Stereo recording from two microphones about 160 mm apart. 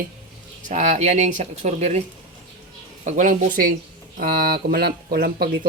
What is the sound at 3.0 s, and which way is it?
Speech, 50° right (ahead or behind).